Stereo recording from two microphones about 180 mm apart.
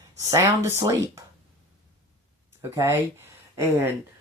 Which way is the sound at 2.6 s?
15° right (ahead or behind).